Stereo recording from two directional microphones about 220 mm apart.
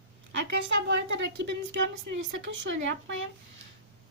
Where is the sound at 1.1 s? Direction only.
50° right (ahead or behind).